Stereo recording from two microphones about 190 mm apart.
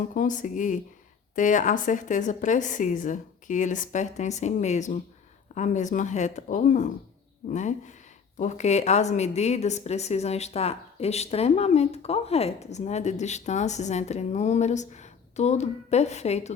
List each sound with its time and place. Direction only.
0.0 s a woman's voice: 45° left (ahead or behind)